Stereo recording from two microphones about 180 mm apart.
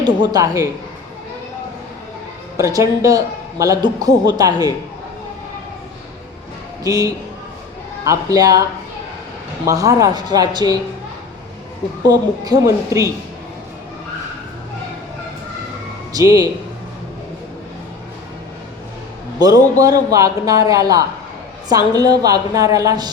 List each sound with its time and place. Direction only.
0.0 s a man's voice: 25° right (ahead or behind)
2.6 s a woman's voice: 15° right (ahead or behind)
6.8 s a man's voice: 20° right (ahead or behind)
9.6 s a man's voice: 20° right (ahead or behind)
12.0 s a man's voice: 20° right (ahead or behind)
16.1 s a man's voice: 20° right (ahead or behind)
19.4 s a man's voice: 20° right (ahead or behind)